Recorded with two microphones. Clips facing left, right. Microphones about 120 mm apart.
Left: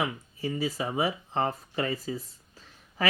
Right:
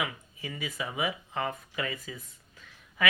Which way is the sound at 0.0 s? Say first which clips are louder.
Left 5 dB; 35° left (ahead or behind).